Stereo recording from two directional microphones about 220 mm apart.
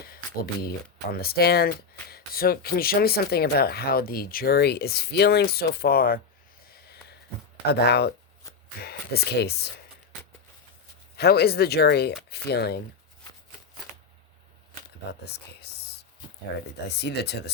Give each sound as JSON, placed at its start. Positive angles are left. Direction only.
{"t": 0.0, "sound": "speech", "side_deg": 45}
{"t": 7.7, "sound": "speech", "side_deg": 45}
{"t": 11.2, "sound": "speech", "side_deg": 45}
{"t": 17.0, "sound": "speech", "side_deg": 50}